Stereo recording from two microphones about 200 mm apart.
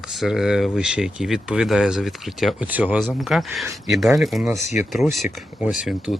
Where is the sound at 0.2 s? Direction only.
5° right (ahead or behind).